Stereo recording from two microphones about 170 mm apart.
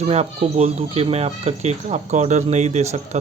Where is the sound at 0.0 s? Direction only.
40° right (ahead or behind).